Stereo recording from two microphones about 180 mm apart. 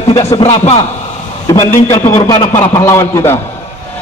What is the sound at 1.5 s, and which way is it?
A man's voice, 15° left (ahead or behind).